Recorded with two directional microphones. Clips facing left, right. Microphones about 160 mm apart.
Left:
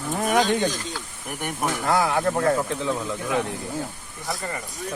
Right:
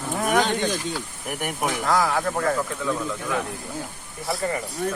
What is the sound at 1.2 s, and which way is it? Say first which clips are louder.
Speech: even; 10° right (ahead or behind).